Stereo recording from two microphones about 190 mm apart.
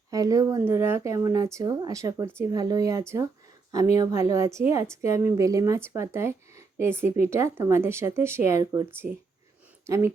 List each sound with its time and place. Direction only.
0.1 s speech: 20° right (ahead or behind)